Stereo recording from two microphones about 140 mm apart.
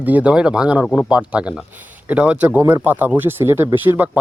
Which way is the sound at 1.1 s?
10° right (ahead or behind).